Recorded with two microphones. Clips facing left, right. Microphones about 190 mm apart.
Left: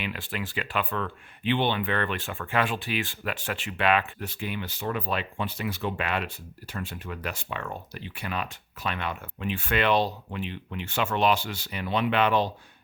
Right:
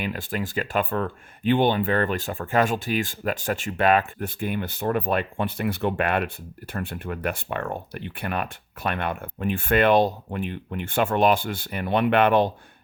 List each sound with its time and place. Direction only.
0.0 s speech: 45° right (ahead or behind)